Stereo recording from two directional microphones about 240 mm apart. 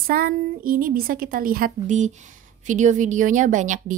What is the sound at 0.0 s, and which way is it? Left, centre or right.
A woman's voice, right.